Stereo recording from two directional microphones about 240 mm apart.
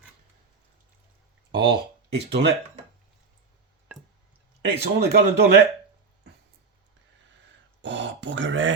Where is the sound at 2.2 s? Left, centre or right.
Right.